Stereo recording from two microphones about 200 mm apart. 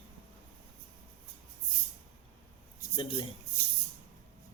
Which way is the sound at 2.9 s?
25° left (ahead or behind).